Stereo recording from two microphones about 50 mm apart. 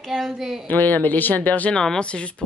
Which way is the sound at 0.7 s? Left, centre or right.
Left.